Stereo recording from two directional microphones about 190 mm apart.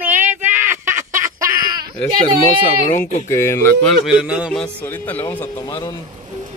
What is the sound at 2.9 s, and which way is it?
Speech, 45° left (ahead or behind).